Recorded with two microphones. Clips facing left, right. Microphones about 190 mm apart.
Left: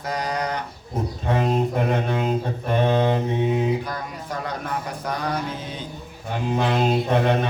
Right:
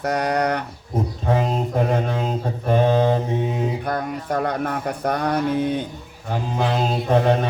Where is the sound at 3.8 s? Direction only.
55° right (ahead or behind).